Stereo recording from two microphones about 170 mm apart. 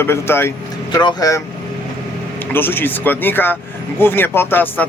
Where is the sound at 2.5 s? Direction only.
10° left (ahead or behind).